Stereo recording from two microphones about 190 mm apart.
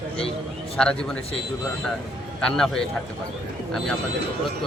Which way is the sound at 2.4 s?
5° left (ahead or behind).